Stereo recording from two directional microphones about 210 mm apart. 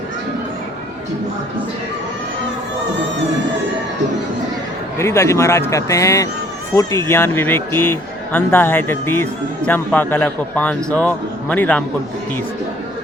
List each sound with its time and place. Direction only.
4.9 s speech: 15° left (ahead or behind)